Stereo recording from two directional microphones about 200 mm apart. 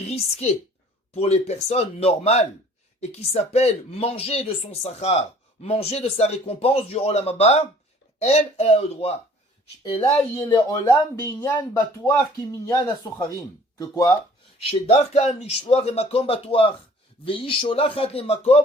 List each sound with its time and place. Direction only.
0.1 s a woman's voice: 30° left (ahead or behind)
14.7 s speech: 30° left (ahead or behind)